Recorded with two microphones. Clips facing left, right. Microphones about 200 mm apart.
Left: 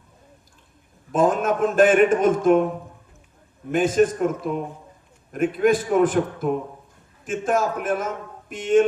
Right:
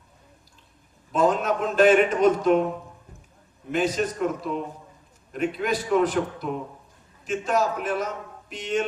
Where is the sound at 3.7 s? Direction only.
50° left (ahead or behind).